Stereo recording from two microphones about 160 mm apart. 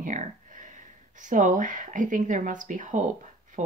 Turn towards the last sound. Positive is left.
turn(degrees=-50)  # may be behind; listen again after turning